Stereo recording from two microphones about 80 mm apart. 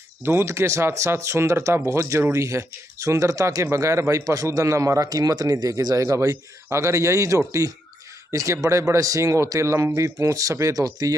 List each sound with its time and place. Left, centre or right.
0.2 s speech: right